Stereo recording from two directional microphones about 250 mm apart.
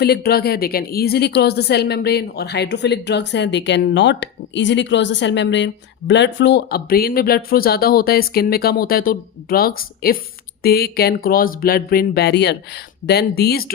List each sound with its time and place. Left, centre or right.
0.0 s a woman's voice: left